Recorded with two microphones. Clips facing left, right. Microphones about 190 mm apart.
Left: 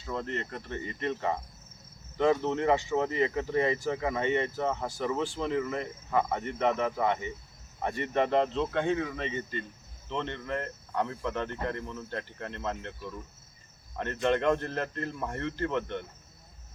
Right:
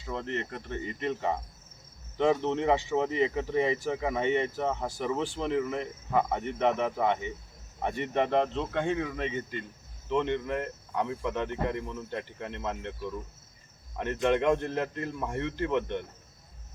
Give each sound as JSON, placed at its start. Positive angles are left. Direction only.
{"t": 0.0, "sound": "speech", "side_deg": -15}
{"t": 13.9, "sound": "speech", "side_deg": -10}